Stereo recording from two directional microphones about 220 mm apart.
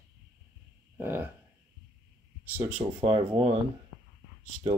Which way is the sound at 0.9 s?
10° right (ahead or behind).